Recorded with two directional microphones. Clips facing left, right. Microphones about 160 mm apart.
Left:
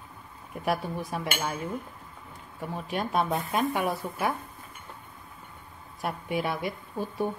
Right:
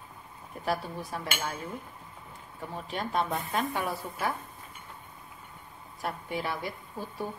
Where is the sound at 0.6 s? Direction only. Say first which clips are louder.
Left 3 dB; 15° left (ahead or behind).